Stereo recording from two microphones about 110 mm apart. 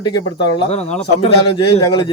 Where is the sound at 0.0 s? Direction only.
45° left (ahead or behind).